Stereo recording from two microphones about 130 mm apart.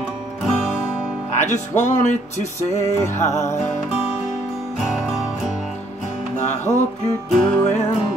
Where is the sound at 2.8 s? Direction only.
20° left (ahead or behind).